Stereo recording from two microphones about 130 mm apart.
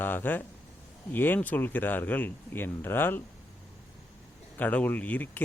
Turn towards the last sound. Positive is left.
turn(degrees=10)  # may be behind; listen again after turning